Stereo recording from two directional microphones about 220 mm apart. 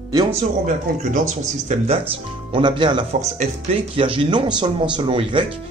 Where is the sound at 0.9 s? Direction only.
35° right (ahead or behind).